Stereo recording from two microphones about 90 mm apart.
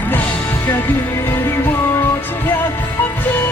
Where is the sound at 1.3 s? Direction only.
25° left (ahead or behind).